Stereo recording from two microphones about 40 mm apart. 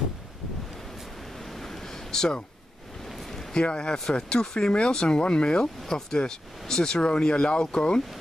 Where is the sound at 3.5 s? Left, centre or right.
Left.